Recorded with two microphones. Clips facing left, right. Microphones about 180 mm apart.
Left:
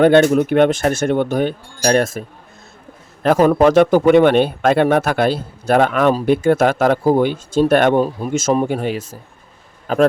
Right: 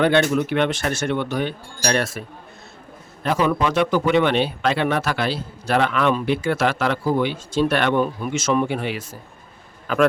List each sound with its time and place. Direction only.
0.0 s speech: 45° left (ahead or behind)
3.2 s speech: 45° left (ahead or behind)